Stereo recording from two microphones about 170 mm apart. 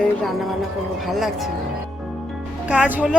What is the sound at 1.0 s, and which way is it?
Speech, centre (ahead or behind).